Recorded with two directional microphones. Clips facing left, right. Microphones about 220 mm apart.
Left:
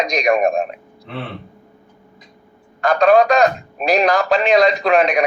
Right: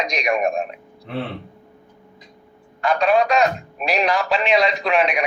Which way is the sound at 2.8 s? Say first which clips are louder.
Left 5 dB; 45° left (ahead or behind).